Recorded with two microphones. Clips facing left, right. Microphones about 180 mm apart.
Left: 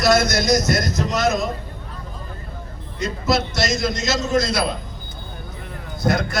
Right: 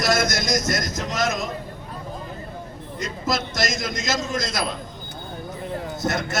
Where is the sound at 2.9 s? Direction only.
45° right (ahead or behind).